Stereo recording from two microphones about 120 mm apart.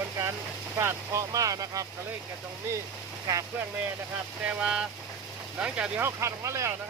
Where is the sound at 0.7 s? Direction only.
25° right (ahead or behind).